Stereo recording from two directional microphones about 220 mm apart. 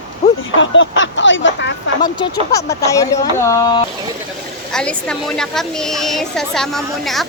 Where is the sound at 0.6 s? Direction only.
60° left (ahead or behind).